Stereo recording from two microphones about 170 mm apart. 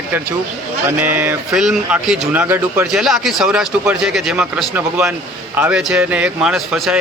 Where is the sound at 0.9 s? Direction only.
10° right (ahead or behind).